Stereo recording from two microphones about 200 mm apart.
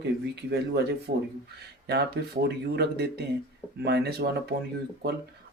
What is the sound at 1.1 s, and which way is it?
Speech, 45° right (ahead or behind).